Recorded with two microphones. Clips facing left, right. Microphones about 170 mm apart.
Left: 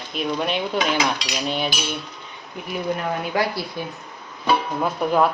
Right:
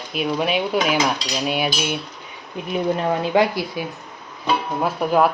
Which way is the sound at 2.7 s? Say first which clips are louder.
Right 4 dB; 25° right (ahead or behind).